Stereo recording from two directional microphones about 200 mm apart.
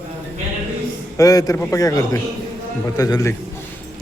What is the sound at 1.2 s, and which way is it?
A man's voice, 15° left (ahead or behind).